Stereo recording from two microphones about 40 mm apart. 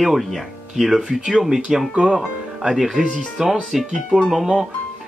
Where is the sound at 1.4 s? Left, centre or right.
Centre.